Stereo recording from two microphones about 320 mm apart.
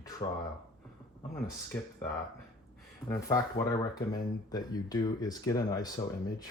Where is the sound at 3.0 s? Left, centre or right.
Centre.